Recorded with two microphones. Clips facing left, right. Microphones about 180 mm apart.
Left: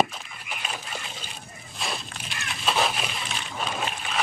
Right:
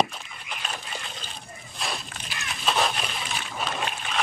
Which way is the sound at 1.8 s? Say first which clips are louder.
Even; centre (ahead or behind).